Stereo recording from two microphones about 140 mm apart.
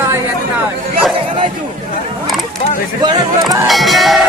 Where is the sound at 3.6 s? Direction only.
Centre (ahead or behind).